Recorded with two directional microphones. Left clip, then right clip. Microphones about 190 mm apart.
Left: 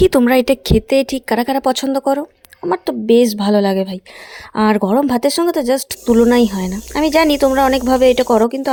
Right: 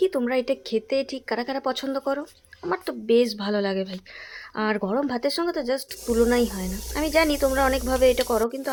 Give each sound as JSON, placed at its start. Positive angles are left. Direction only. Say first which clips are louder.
{"t": 0.0, "sound": "speech", "louder": "left 11 dB", "side_deg": 55}